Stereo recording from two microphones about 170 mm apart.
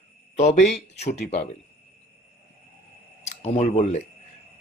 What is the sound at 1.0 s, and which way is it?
Speech, 75° left (ahead or behind).